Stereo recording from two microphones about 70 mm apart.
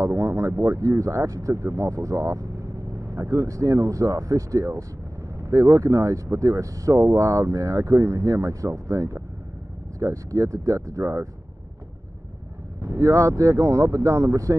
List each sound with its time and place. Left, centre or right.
0.0 s speech: right
12.8 s speech: right